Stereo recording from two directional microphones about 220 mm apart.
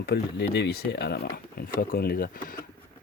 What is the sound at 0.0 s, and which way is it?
Speech, 50° left (ahead or behind).